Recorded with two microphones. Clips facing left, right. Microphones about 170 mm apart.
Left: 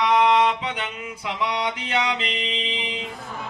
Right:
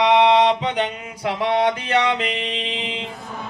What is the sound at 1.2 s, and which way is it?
Music, 50° right (ahead or behind).